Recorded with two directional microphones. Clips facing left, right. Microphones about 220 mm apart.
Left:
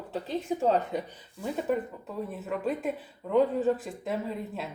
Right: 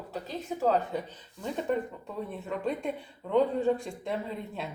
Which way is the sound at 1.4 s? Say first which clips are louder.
Left 1 dB; 5° left (ahead or behind).